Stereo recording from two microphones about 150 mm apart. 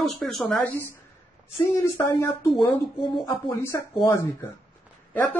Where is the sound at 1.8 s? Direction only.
20° left (ahead or behind).